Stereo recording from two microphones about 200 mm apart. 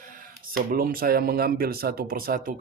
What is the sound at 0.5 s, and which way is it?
Speech, 45° right (ahead or behind).